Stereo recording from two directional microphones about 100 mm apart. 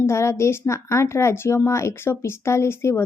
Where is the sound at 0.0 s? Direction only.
25° left (ahead or behind).